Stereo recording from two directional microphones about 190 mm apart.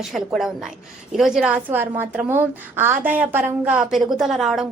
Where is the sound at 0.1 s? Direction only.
Centre (ahead or behind).